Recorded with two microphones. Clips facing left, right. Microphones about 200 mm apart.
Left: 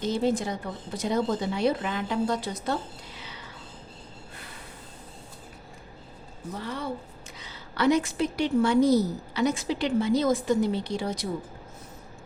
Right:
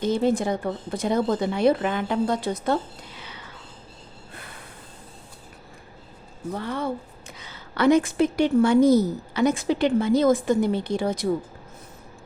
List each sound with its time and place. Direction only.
0.0 s speech: 55° right (ahead or behind)
6.5 s a woman's voice: 55° right (ahead or behind)